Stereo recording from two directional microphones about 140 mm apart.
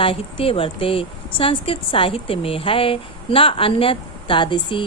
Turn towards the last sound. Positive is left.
turn(degrees=35)  # may be behind; listen again after turning